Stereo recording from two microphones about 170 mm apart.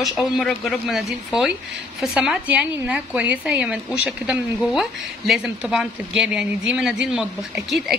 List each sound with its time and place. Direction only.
0.0 s a woman's voice: centre (ahead or behind)